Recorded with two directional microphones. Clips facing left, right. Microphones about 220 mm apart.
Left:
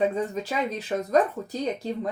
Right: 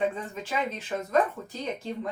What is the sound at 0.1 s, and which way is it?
Speech, 40° left (ahead or behind).